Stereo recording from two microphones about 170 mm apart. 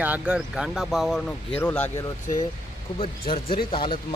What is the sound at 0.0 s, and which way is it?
Speech, 10° right (ahead or behind).